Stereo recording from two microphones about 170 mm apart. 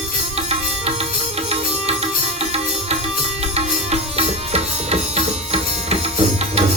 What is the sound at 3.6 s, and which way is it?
Music, 40° right (ahead or behind).